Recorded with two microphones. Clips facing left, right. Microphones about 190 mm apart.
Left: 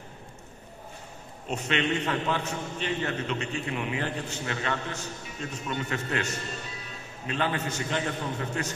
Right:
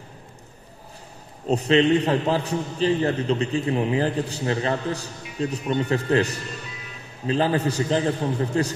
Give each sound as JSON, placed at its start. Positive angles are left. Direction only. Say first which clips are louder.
{"t": 1.5, "sound": "a man's voice", "louder": "right 10 dB", "side_deg": -35}